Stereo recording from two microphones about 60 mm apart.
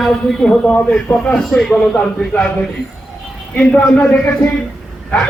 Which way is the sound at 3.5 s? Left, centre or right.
Centre.